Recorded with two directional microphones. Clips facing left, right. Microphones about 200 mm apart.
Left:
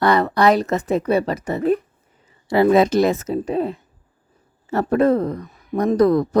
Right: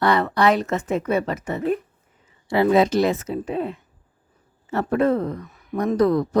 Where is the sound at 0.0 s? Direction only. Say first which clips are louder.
Left 3 dB; 40° left (ahead or behind).